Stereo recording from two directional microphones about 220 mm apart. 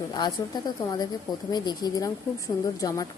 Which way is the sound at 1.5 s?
20° left (ahead or behind).